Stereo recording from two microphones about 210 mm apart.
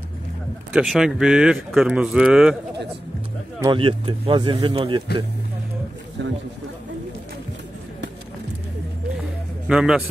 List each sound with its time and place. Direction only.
0.7 s speech: centre (ahead or behind)
3.6 s speech: 25° right (ahead or behind)
6.2 s speech: 60° right (ahead or behind)
9.7 s speech: 5° right (ahead or behind)